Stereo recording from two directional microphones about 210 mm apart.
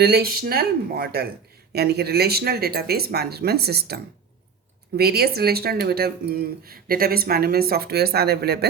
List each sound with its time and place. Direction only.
0.0 s speech: 50° right (ahead or behind)